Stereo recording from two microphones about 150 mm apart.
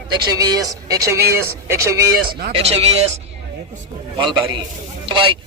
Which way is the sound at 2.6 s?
45° right (ahead or behind).